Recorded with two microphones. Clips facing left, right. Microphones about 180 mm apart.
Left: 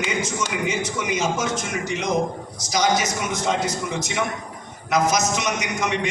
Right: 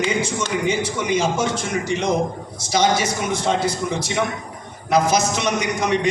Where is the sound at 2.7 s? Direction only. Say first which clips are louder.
Right 2 dB; 30° right (ahead or behind).